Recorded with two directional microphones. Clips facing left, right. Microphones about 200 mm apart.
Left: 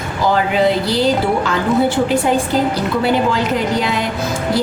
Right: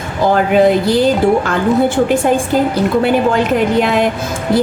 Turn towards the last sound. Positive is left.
turn(degrees=-55)  # may be behind; listen again after turning